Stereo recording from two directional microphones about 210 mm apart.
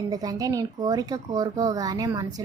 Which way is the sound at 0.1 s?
20° right (ahead or behind).